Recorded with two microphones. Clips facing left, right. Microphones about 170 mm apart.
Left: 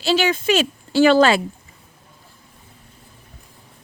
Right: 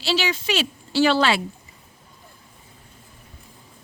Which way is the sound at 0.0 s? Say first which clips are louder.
Left 5 dB; 50° left (ahead or behind).